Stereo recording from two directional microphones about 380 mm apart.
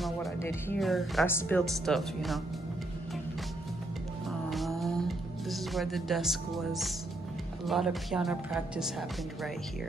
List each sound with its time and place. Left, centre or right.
0.0 s speech: centre
4.5 s music: centre
7.6 s speech: centre